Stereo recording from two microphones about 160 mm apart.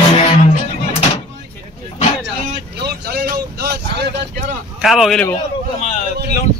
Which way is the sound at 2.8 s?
85° right.